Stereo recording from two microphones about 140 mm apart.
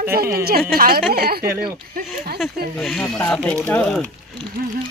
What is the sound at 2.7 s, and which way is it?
Speech, 5° left (ahead or behind).